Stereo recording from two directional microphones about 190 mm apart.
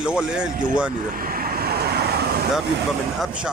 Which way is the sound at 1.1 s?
50° right (ahead or behind).